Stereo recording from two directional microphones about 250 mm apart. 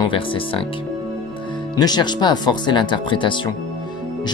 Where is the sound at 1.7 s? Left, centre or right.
Centre.